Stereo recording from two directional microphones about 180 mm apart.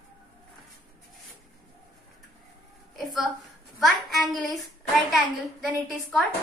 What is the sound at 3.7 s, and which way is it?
A woman's voice, centre (ahead or behind).